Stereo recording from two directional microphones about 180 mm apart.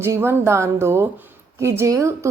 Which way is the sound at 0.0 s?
15° right (ahead or behind).